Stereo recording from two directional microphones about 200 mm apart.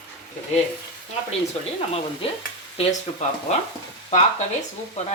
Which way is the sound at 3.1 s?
30° left (ahead or behind).